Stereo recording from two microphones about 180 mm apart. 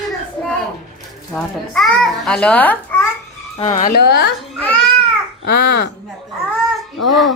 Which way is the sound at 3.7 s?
50° left (ahead or behind).